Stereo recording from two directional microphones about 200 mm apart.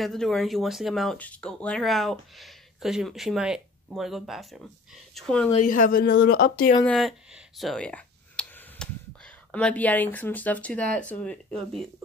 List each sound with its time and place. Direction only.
0.0 s speech: centre (ahead or behind)
5.6 s speech: 40° left (ahead or behind)
6.9 s speech: centre (ahead or behind)